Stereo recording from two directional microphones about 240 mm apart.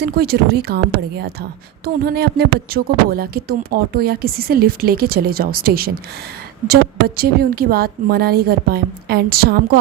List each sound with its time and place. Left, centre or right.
0.0 s speech: right
7.2 s speech: right